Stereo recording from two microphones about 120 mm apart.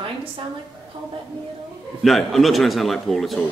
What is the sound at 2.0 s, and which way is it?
Speech, centre (ahead or behind).